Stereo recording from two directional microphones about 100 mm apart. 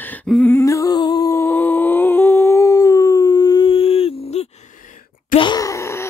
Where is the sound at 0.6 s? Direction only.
35° left (ahead or behind).